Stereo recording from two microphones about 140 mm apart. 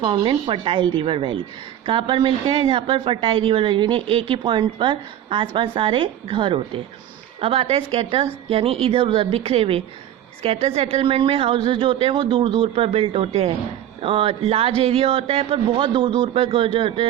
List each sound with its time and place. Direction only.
0.0 s a woman's voice: 35° right (ahead or behind)